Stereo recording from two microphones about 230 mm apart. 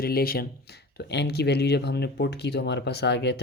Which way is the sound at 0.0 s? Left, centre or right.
Left.